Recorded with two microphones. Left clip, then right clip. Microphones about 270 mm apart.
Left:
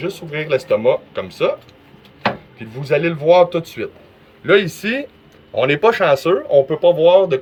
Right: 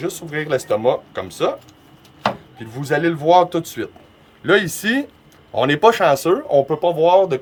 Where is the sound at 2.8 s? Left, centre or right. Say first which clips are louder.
Left 1 dB; right.